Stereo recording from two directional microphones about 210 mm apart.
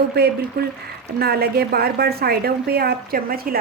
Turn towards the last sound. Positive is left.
turn(degrees=-45)  # may be behind; listen again after turning